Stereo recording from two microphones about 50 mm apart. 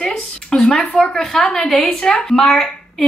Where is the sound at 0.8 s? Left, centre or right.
Centre.